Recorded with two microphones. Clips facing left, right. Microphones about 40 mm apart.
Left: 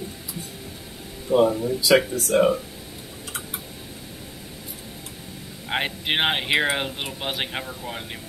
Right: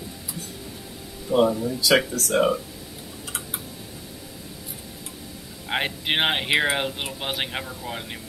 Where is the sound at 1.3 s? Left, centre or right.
Left.